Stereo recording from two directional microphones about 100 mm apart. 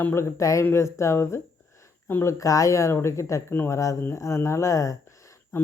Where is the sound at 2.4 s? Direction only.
35° left (ahead or behind).